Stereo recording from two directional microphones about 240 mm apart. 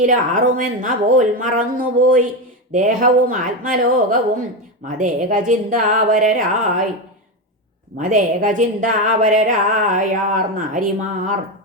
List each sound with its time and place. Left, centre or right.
0.0 s speech: right
7.9 s speech: right